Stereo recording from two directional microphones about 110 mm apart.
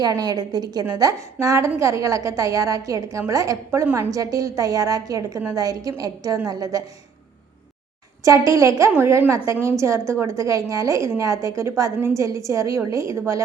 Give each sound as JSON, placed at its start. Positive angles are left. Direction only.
{"t": 0.0, "sound": "a woman's voice", "side_deg": -30}
{"t": 8.2, "sound": "a woman's voice", "side_deg": -30}